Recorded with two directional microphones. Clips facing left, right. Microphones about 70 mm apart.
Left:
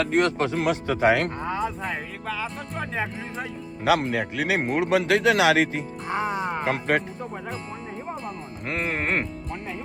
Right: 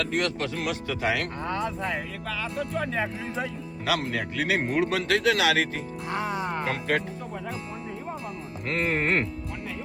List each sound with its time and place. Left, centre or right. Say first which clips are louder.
0.0 s a man's voice: left 5 dB; left
1.4 s speech: left 1 dB; centre
3.8 s a man's voice: left 6 dB; left
6.1 s speech: left 3 dB; centre
8.6 s speech: right 1 dB; centre